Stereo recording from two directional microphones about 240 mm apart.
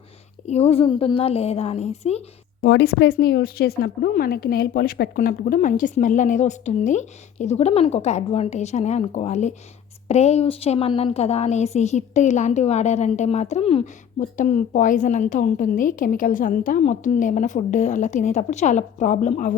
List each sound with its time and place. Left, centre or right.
0.4 s a woman's voice: left
2.6 s a woman's voice: left